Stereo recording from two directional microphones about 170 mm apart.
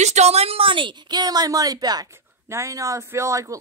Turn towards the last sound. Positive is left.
turn(degrees=-20)  # may be behind; listen again after turning